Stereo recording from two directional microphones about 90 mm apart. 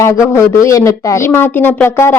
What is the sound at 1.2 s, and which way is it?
Speech, 25° left (ahead or behind).